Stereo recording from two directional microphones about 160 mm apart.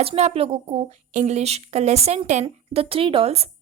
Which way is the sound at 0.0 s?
40° right (ahead or behind).